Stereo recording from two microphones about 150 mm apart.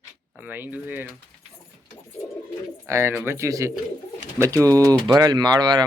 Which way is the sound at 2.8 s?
20° right (ahead or behind).